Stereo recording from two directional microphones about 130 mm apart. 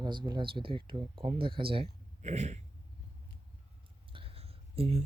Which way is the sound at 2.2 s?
60° right (ahead or behind).